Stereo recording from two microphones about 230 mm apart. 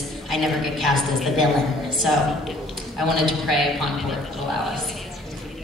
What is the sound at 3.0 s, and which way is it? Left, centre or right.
A woman's voice, centre.